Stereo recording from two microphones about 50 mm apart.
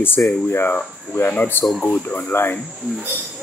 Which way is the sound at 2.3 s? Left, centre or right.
Left.